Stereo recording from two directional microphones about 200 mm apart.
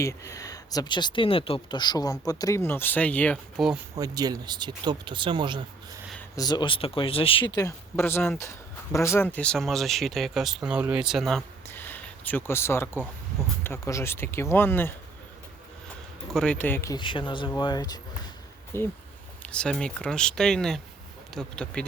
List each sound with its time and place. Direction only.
0.0 s speech: 15° left (ahead or behind)
3.9 s speech: 20° right (ahead or behind)
6.3 s speech: 20° left (ahead or behind)
16.3 s speech: 5° left (ahead or behind)